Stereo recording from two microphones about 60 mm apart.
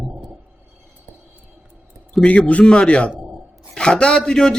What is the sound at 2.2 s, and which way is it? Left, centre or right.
A man's voice, left.